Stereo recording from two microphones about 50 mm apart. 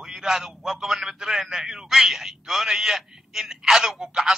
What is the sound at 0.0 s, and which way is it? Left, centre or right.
A man's voice, centre.